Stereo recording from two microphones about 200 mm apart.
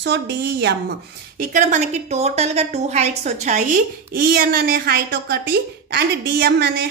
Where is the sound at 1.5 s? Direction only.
35° right (ahead or behind); by 6.9 s 55° right (ahead or behind).